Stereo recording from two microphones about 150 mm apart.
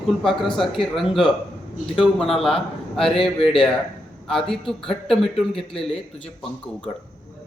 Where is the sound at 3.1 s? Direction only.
40° left (ahead or behind).